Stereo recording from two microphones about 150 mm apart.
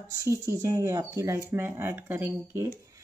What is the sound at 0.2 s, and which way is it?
Speech, 20° right (ahead or behind).